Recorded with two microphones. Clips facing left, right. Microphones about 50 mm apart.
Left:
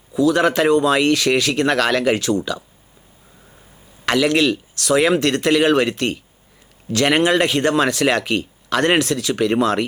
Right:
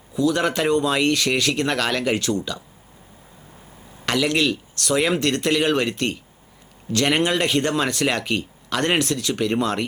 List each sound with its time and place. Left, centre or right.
0.1 s speech: left
4.0 s speech: left